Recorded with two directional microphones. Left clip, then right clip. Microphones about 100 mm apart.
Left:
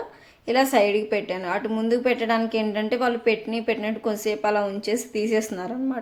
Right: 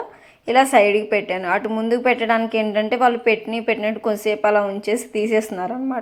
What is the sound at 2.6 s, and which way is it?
A woman's voice, 15° left (ahead or behind).